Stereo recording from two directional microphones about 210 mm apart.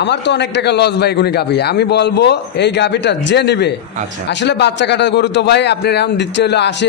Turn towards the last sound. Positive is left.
turn(degrees=55)  # may be behind; listen again after turning